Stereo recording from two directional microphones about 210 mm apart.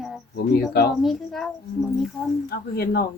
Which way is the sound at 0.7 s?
50° left (ahead or behind).